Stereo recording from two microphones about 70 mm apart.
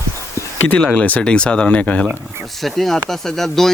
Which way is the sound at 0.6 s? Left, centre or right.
Left.